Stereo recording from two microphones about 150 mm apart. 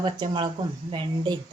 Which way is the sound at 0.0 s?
30° right (ahead or behind).